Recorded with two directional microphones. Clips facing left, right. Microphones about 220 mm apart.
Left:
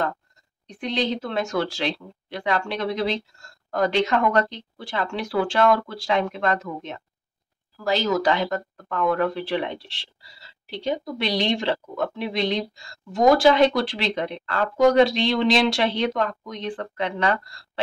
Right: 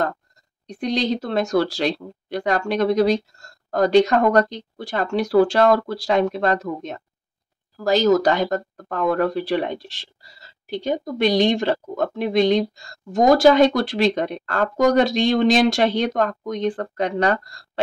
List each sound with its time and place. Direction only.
0.7 s speech: 40° right (ahead or behind)